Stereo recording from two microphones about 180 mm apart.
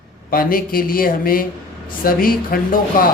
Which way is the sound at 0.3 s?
55° left (ahead or behind).